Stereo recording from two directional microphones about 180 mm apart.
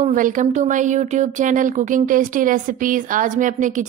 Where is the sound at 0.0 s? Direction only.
45° right (ahead or behind).